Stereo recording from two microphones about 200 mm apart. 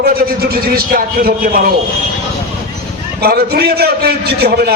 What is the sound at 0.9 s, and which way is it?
Speech, 45° right (ahead or behind).